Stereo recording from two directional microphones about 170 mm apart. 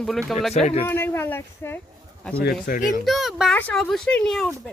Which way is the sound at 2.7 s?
50° left (ahead or behind).